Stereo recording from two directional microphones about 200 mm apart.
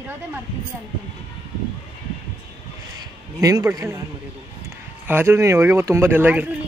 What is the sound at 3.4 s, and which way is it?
Speech, 15° right (ahead or behind).